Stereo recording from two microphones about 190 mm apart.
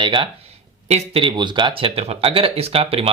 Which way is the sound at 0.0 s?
25° right (ahead or behind).